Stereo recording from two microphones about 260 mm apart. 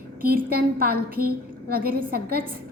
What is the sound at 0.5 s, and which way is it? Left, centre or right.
A woman's voice, right.